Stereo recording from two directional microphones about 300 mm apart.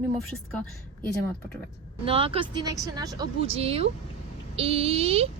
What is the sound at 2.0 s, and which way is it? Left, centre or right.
Speech, centre.